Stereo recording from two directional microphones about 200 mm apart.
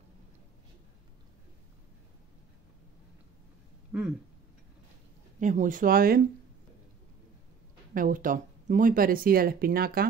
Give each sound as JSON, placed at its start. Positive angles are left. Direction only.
{"t": 3.9, "sound": "a sound", "side_deg": -10}
{"t": 5.4, "sound": "speech", "side_deg": -40}
{"t": 7.9, "sound": "speech", "side_deg": -45}